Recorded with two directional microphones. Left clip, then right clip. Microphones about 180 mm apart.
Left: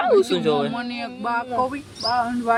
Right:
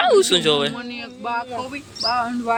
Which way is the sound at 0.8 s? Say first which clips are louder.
Left 2 dB; 65° left (ahead or behind).